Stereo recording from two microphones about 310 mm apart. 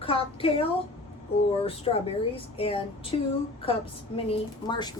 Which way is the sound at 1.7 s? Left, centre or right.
Centre.